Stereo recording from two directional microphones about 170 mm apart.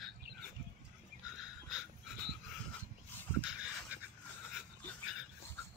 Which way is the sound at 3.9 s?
10° right (ahead or behind).